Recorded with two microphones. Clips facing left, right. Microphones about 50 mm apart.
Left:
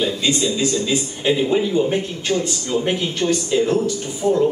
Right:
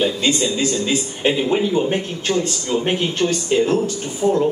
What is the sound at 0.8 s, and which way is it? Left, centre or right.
Speech, right.